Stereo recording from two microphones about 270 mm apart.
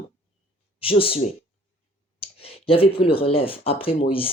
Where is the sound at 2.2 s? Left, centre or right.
Left.